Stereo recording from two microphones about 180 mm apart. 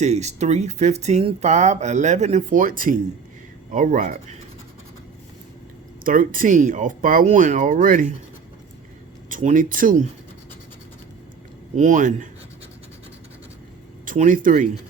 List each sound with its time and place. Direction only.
0.0 s speech: 40° right (ahead or behind)
6.1 s speech: 50° right (ahead or behind)
9.3 s speech: 45° right (ahead or behind)
11.8 s speech: 45° right (ahead or behind)
14.0 s speech: 45° right (ahead or behind)